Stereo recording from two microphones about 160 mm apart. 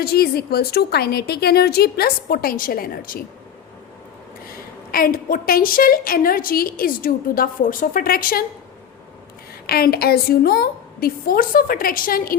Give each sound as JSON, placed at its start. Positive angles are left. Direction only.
{"t": 0.0, "sound": "a woman's voice", "side_deg": 75}
{"t": 4.5, "sound": "a woman's voice", "side_deg": 65}
{"t": 9.6, "sound": "a woman's voice", "side_deg": 70}